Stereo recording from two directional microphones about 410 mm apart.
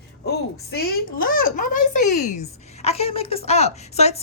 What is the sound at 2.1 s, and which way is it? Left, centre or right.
Speech, left.